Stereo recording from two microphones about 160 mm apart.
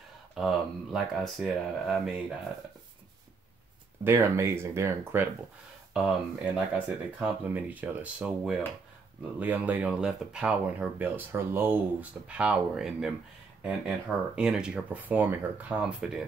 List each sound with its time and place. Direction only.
0.3 s speech: centre (ahead or behind)
4.0 s speech: 15° right (ahead or behind)
5.9 s speech: 5° right (ahead or behind)